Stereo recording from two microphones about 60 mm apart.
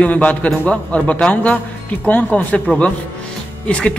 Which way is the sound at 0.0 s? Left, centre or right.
Left.